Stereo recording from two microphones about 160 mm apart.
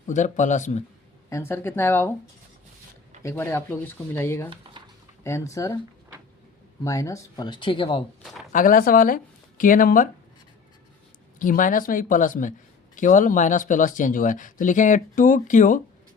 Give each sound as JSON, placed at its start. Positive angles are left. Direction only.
{"t": 0.1, "sound": "speech", "side_deg": 50}
{"t": 1.3, "sound": "speech", "side_deg": 15}
{"t": 3.2, "sound": "speech", "side_deg": 15}
{"t": 6.8, "sound": "speech", "side_deg": 20}
{"t": 8.2, "sound": "a sound", "side_deg": 0}
{"t": 8.5, "sound": "speech", "side_deg": 60}
{"t": 11.3, "sound": "speech", "side_deg": 55}